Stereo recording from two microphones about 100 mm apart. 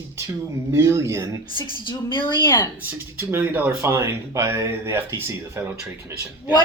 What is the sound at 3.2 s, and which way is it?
Speech, 20° right (ahead or behind).